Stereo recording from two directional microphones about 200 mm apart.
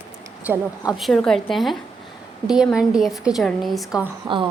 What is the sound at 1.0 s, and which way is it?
A woman's voice, centre (ahead or behind).